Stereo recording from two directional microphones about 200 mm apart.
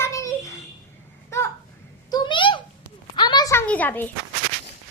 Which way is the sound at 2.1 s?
25° left (ahead or behind).